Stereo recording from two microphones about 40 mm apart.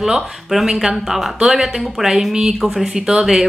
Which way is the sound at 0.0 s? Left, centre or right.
Centre.